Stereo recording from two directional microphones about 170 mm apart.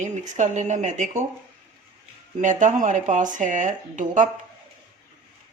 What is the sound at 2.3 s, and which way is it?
Speech, 45° right (ahead or behind).